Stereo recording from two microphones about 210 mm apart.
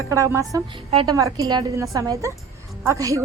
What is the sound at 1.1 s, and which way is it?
A woman's voice, 15° right (ahead or behind).